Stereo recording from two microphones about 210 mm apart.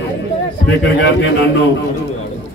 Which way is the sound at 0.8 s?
60° left (ahead or behind).